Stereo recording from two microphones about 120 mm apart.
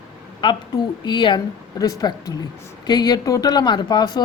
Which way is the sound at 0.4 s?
45° left (ahead or behind).